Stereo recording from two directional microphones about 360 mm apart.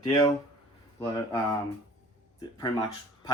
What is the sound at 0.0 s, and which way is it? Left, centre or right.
Speech, centre.